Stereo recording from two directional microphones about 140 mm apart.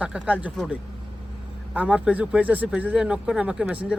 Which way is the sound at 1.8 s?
10° right (ahead or behind).